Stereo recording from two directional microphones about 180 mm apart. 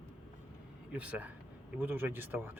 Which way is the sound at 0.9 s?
5° right (ahead or behind).